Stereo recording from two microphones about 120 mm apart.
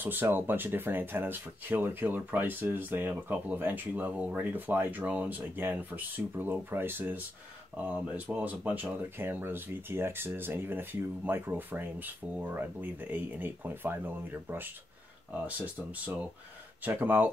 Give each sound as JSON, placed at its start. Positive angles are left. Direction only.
{"t": 0.0, "sound": "speech", "side_deg": -15}